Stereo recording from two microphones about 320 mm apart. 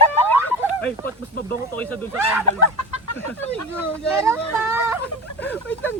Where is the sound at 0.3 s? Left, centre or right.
Centre.